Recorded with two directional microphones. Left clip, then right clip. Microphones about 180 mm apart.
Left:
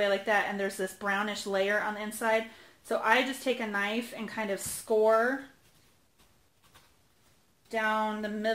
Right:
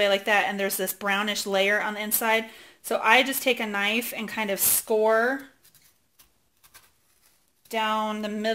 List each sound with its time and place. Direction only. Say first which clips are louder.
0.0 s speech: right 5 dB; 25° right (ahead or behind)
7.7 s speech: right 3 dB; 30° right (ahead or behind)